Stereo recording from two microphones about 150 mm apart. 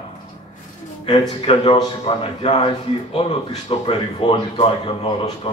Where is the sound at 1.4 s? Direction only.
40° left (ahead or behind).